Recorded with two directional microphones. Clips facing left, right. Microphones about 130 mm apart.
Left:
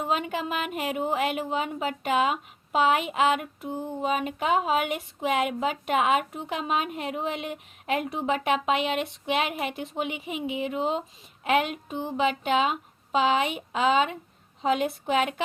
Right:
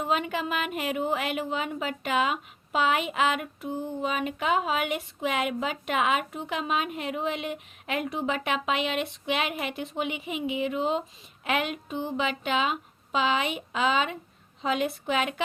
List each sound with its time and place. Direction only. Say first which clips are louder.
0.1 s a woman's voice: right 1 dB; 35° left (ahead or behind)